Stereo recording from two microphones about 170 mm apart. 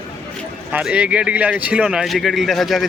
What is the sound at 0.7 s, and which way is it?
Speech, 5° right (ahead or behind).